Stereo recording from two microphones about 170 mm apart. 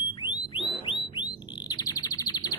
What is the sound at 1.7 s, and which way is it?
Bird, 20° left (ahead or behind).